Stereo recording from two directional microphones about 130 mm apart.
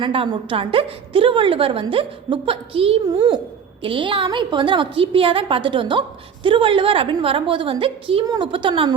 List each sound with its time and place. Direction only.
0.0 s a woman's voice: 45° right (ahead or behind)